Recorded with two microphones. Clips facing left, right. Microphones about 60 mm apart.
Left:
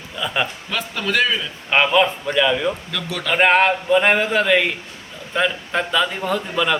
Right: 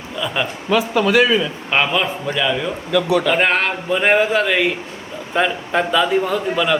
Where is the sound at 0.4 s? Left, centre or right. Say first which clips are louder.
Even; centre.